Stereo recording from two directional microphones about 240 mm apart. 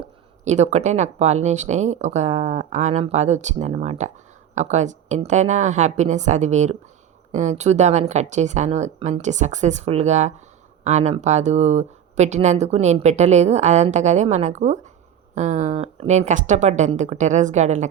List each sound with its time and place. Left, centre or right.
0.4 s speech: right